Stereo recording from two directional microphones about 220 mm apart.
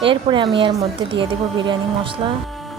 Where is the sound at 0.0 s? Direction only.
20° right (ahead or behind).